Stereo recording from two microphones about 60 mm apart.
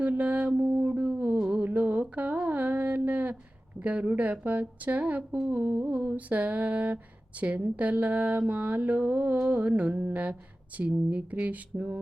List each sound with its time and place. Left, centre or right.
0.0 s mantra: right
1.5 s a sound: right
3.8 s speech: right
5.5 s humming: right
6.0 s speech: right